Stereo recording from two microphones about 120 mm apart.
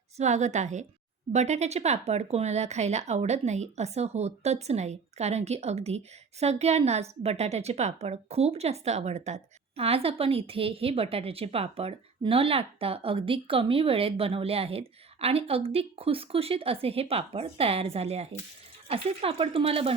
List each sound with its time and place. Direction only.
0.2 s a woman's voice: 75° right (ahead or behind)
1.3 s a woman's voice: 70° right (ahead or behind); by 20.0 s 55° right (ahead or behind)